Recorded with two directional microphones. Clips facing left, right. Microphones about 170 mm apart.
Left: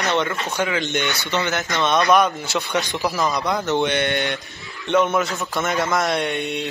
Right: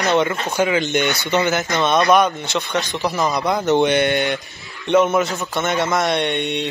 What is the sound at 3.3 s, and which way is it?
Speech, 5° right (ahead or behind).